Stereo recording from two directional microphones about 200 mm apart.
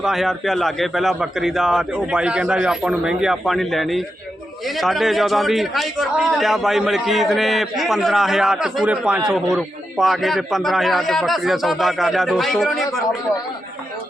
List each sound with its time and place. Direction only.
0.0 s a man's voice: centre (ahead or behind)